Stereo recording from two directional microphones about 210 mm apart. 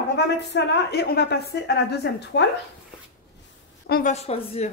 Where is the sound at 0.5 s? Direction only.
55° left (ahead or behind).